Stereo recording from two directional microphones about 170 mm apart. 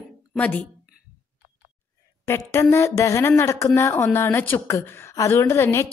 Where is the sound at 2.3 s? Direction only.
15° left (ahead or behind).